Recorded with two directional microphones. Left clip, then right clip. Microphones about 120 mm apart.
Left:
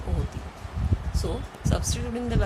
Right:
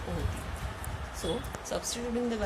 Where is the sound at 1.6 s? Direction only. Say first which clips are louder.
Left 3 dB; 35° left (ahead or behind).